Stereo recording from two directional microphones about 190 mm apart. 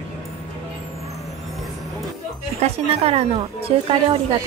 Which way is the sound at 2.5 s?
30° right (ahead or behind).